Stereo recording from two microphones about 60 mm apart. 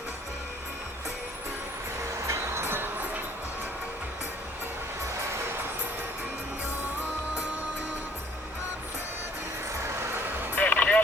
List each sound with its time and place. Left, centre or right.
2.1 s music: right
9.7 s vehicle: right
10.5 s music: left